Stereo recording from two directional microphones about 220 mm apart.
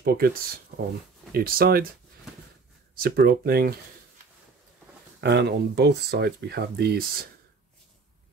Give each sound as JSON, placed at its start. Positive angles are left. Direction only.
{"t": 0.0, "sound": "speech", "side_deg": -45}
{"t": 3.0, "sound": "speech", "side_deg": -45}
{"t": 5.2, "sound": "speech", "side_deg": -50}